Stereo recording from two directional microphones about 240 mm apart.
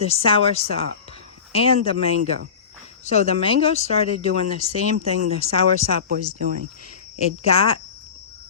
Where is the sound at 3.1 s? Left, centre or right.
Left.